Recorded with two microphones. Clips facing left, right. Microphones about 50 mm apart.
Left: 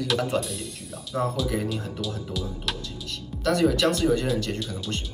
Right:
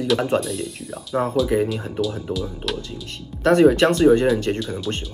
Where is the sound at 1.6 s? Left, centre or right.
Centre.